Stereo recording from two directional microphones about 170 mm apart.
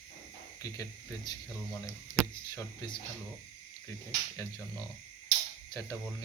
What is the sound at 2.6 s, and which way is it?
Speech, 25° left (ahead or behind).